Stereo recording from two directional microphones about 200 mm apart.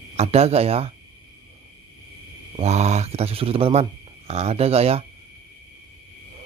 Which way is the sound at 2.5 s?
35° right (ahead or behind).